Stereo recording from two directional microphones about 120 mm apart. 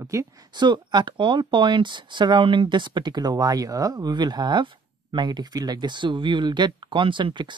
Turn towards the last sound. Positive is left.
turn(degrees=-40)  # may be behind; listen again after turning